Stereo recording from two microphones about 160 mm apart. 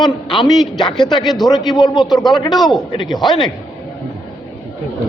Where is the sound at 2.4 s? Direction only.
25° left (ahead or behind).